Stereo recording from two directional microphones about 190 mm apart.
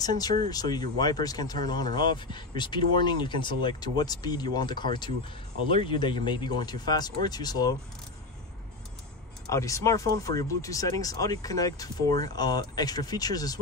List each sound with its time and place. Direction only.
0.0 s speech: 20° left (ahead or behind)
9.5 s speech: 15° left (ahead or behind)